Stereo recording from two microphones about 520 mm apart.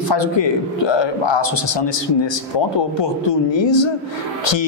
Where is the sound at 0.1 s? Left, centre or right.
Left.